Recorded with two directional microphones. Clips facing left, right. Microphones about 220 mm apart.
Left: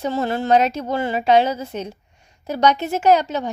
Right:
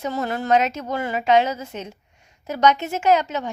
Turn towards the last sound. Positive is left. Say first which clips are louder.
# left 3 dB
turn(degrees=35)  # may be behind; listen again after turning